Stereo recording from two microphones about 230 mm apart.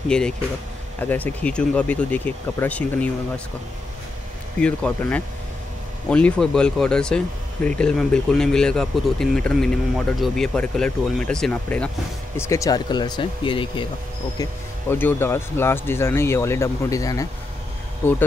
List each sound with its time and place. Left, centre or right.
0.1 s speech: centre
4.6 s speech: centre; by 13.8 s left
14.4 s speech: centre